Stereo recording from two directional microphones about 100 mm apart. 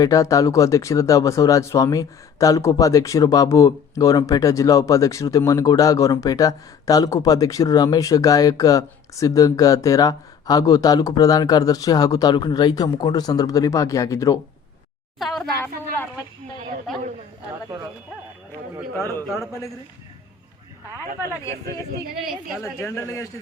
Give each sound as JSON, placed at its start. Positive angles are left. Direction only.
{"t": 0.0, "sound": "speech", "side_deg": 35}
{"t": 15.2, "sound": "speech", "side_deg": 0}
{"t": 22.2, "sound": "a woman's voice", "side_deg": -5}
{"t": 23.0, "sound": "speech", "side_deg": 30}